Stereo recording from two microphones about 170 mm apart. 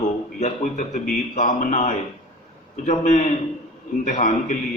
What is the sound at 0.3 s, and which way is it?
Speech, 45° left (ahead or behind).